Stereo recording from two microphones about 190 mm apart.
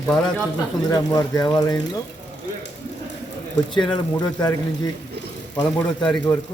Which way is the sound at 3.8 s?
20° left (ahead or behind).